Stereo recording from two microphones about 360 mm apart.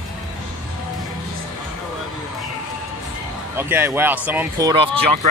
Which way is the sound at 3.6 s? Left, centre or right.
Centre.